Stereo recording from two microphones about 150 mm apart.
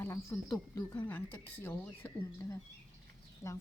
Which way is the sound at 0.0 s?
15° left (ahead or behind).